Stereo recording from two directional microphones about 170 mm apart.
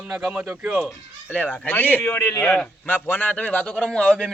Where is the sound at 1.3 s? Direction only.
10° left (ahead or behind).